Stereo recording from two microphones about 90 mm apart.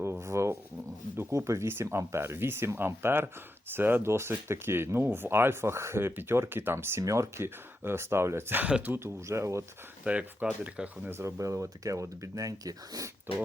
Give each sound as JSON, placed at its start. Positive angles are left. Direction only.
{"t": 0.0, "sound": "speech", "side_deg": -30}
{"t": 9.2, "sound": "speech", "side_deg": -35}
{"t": 10.0, "sound": "speech", "side_deg": -10}
{"t": 11.1, "sound": "speech", "side_deg": -30}